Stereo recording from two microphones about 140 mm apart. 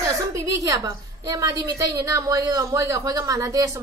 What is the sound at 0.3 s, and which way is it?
A woman's voice, 25° right (ahead or behind).